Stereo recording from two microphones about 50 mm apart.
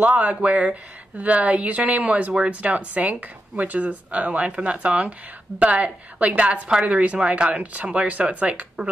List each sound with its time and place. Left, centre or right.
0.0 s speech: right